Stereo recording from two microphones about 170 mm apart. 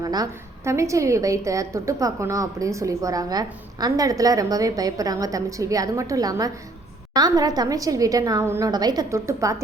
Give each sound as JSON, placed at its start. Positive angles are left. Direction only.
{"t": 0.0, "sound": "a woman's voice", "side_deg": -20}